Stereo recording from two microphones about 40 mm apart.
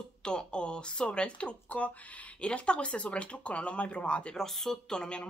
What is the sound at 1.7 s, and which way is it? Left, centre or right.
Speech, left.